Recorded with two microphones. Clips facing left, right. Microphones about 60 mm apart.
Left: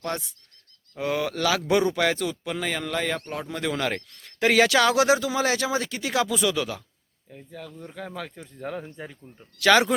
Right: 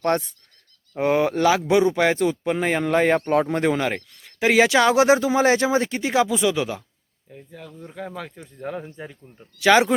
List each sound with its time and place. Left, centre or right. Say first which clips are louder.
0.0 s speech: right 9 dB; right
0.9 s speech: right 7 dB; right
3.2 s speech: right 11 dB; right
3.7 s speech: right 5 dB; right
7.3 s speech: even; centre
9.6 s speech: right 3 dB; centre